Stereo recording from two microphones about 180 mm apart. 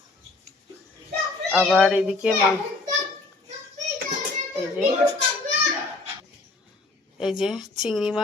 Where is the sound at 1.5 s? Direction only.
5° left (ahead or behind).